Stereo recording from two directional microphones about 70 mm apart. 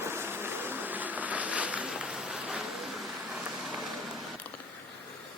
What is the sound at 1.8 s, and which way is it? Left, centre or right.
Rain, centre.